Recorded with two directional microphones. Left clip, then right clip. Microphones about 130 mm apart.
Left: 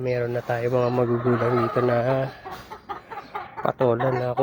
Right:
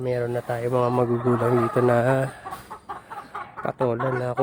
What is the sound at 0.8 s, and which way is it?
Speech, 25° right (ahead or behind).